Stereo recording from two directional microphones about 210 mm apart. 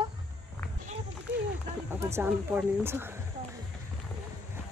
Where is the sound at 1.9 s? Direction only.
10° right (ahead or behind).